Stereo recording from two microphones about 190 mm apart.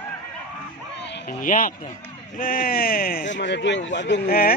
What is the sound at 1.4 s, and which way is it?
A man's voice, 45° left (ahead or behind).